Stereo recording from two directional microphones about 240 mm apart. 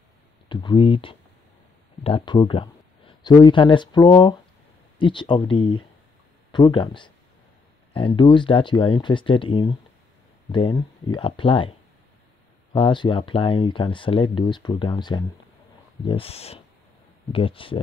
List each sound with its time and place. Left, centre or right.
0.5 s speech: centre
12.7 s speech: centre